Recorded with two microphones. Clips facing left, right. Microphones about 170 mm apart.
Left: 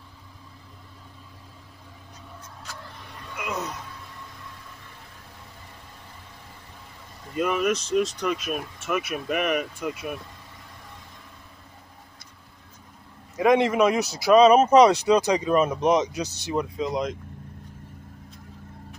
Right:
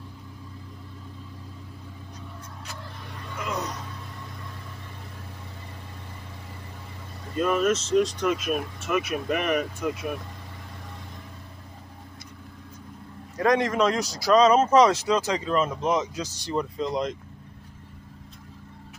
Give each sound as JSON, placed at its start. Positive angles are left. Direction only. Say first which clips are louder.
{"t": 7.3, "sound": "speech", "louder": "right 1 dB", "side_deg": 15}
{"t": 13.4, "sound": "speech", "louder": "left 3 dB", "side_deg": 20}
{"t": 13.7, "sound": "speech", "louder": "left 3 dB", "side_deg": 10}
{"t": 16.5, "sound": "speech", "louder": "left 1 dB", "side_deg": 5}